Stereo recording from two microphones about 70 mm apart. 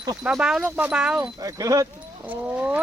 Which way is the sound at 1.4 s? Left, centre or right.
Right.